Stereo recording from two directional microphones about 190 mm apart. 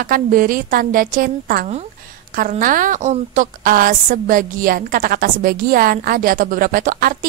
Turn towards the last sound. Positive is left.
turn(degrees=-45)  # may be behind; listen again after turning